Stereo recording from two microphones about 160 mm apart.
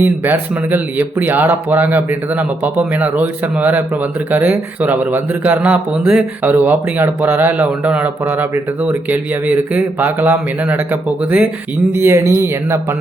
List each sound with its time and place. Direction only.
0.0 s a man's voice: 10° right (ahead or behind)
11.9 s a man's voice: 15° right (ahead or behind)